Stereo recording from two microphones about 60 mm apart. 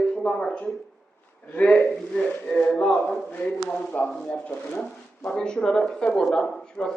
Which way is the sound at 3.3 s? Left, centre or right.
Left.